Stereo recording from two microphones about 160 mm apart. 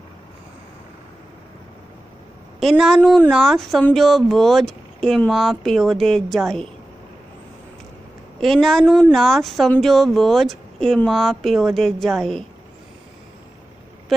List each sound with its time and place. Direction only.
2.6 s speech: centre (ahead or behind)
8.4 s speech: centre (ahead or behind)